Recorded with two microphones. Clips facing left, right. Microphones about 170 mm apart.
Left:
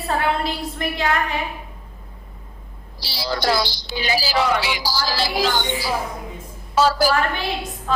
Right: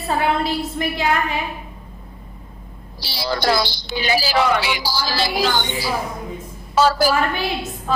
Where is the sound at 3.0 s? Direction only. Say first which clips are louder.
Right 2 dB; 60° right (ahead or behind).